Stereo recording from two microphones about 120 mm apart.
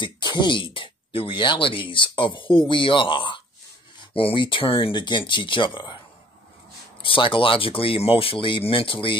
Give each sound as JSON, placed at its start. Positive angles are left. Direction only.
{"t": 0.0, "sound": "speech", "side_deg": 40}
{"t": 7.0, "sound": "speech", "side_deg": 45}